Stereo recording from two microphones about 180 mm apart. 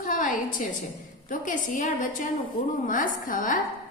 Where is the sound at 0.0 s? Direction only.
45° left (ahead or behind).